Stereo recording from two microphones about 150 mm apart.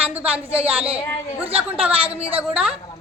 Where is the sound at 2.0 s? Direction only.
40° right (ahead or behind).